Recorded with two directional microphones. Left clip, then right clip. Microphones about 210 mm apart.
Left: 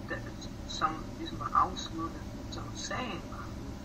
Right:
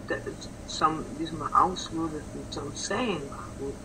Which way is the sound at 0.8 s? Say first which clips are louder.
Right 7 dB; 50° right (ahead or behind).